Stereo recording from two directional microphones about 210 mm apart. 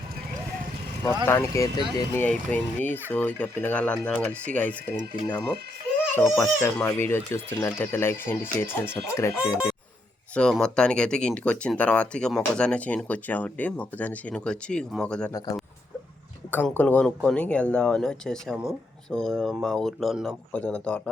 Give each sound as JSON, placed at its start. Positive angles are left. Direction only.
{"t": 1.0, "sound": "speech", "side_deg": 10}
{"t": 6.3, "sound": "speech", "side_deg": 10}
{"t": 10.3, "sound": "speech", "side_deg": 5}
{"t": 15.3, "sound": "speech", "side_deg": 20}